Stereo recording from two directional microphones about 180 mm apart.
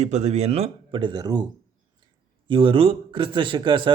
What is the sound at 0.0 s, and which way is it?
A man's voice, 40° right (ahead or behind).